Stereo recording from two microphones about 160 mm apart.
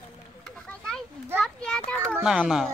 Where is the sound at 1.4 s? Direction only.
5° left (ahead or behind).